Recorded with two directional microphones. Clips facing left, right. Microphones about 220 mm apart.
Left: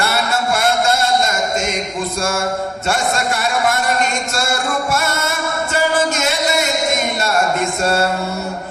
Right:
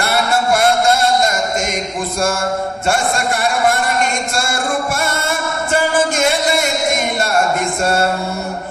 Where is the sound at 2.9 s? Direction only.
50° right (ahead or behind).